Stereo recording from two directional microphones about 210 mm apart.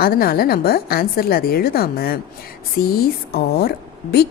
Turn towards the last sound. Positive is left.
turn(degrees=50)  # may be behind; listen again after turning